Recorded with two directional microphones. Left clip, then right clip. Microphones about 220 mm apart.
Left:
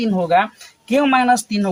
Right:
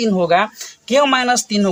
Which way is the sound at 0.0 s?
45° right (ahead or behind).